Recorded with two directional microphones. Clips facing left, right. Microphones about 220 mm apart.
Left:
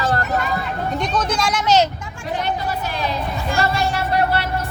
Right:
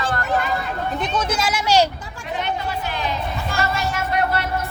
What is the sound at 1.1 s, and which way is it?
Speech, 5° right (ahead or behind).